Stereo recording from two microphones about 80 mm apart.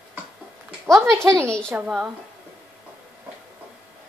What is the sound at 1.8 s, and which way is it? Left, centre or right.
Speech, centre.